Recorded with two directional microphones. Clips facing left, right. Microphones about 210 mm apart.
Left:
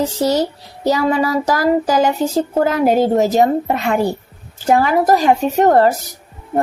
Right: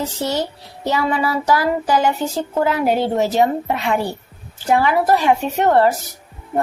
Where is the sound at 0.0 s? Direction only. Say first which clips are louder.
Left 6 dB; 40° left (ahead or behind).